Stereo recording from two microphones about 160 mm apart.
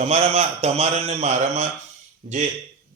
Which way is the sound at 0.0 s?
40° right (ahead or behind).